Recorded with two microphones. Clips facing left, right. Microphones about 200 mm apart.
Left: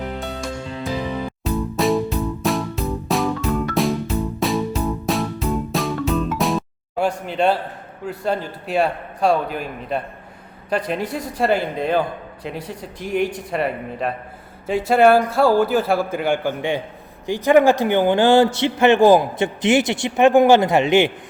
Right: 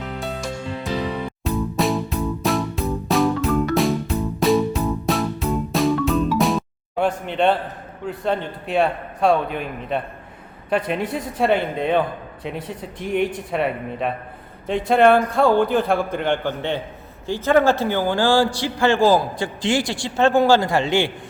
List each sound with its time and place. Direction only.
1.5 s music: centre (ahead or behind)
8.0 s a man's voice: 5° left (ahead or behind); by 21.1 s 20° left (ahead or behind)